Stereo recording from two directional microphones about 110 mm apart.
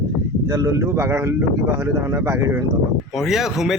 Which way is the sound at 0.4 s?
30° right (ahead or behind).